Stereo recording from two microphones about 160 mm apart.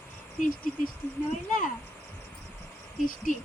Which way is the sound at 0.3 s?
50° left (ahead or behind).